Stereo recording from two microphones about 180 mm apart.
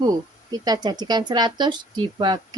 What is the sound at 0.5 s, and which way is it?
A woman's voice, 20° right (ahead or behind).